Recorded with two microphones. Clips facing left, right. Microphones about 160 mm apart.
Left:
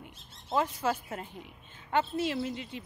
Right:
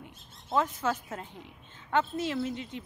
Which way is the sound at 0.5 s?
10° left (ahead or behind).